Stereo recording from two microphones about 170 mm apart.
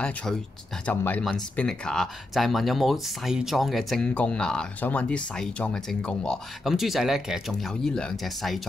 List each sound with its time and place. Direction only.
0.0 s speech: 5° left (ahead or behind)